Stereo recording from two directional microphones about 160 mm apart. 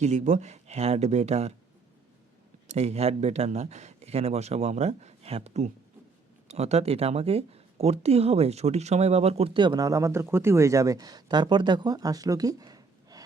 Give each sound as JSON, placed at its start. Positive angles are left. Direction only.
{"t": 0.0, "sound": "speech", "side_deg": -50}
{"t": 2.6, "sound": "speech", "side_deg": -40}